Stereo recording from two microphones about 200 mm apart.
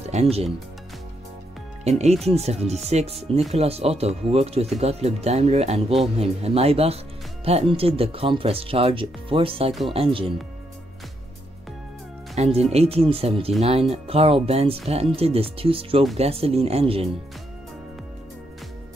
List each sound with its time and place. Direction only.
0.0 s speech: 30° right (ahead or behind)
1.9 s speech: 35° right (ahead or behind)
12.4 s speech: 30° right (ahead or behind)